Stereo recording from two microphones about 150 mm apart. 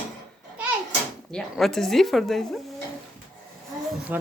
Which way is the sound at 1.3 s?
Centre (ahead or behind).